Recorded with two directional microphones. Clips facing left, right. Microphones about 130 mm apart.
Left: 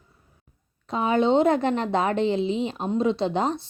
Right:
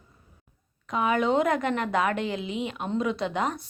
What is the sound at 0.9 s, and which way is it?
A woman's voice, 30° left (ahead or behind).